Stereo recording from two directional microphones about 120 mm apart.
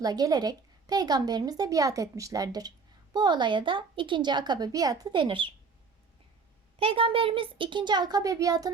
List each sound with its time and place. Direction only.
0.0 s a woman's voice: 35° right (ahead or behind)
6.7 s a woman's voice: 50° right (ahead or behind); by 8.7 s 30° right (ahead or behind)